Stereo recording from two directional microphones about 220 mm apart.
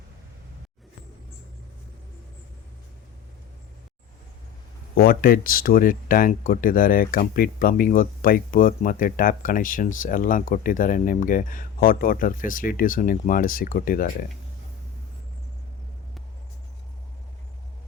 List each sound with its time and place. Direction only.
4.9 s speech: 45° left (ahead or behind)